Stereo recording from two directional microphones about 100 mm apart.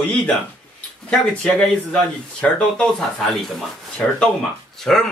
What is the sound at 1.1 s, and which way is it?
A man's voice, 10° left (ahead or behind).